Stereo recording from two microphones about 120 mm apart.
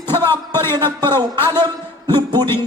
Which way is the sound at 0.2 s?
20° left (ahead or behind).